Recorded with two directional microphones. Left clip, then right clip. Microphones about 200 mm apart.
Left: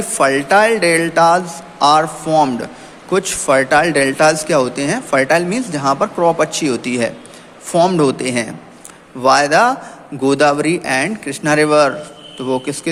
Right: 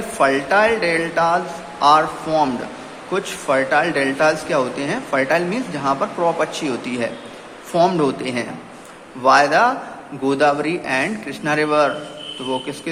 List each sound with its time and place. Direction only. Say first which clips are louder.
0.2 s a man's voice: left 4 dB; 45° left (ahead or behind)